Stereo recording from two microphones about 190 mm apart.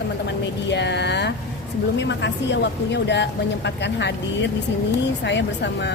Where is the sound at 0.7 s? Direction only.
65° left (ahead or behind).